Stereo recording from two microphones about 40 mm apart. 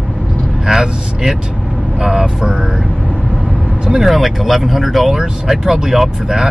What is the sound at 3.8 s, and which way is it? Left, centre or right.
Speech, centre.